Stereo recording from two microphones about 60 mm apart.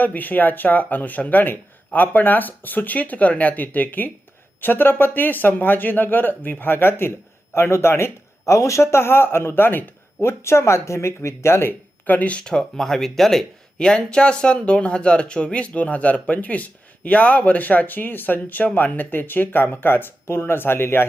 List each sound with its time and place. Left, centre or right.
0.0 s speech: left
10.4 s speech: left
12.0 s speech: left